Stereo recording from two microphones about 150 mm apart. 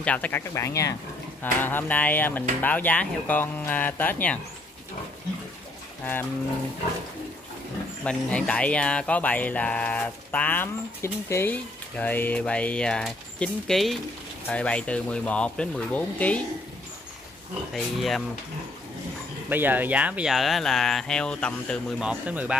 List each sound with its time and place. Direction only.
0.0 s speech: 10° left (ahead or behind)
8.0 s speech: 10° left (ahead or behind)
17.7 s speech: centre (ahead or behind)
19.5 s speech: 15° right (ahead or behind); by 22.0 s 5° left (ahead or behind)
22.0 s speech: 10° right (ahead or behind)